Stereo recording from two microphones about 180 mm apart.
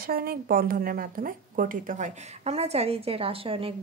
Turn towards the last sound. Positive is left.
turn(degrees=-30)  # may be behind; listen again after turning